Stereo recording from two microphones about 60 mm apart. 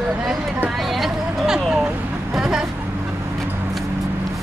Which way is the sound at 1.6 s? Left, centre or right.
Centre.